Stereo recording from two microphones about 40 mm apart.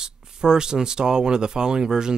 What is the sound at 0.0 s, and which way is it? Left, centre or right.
Speech, centre.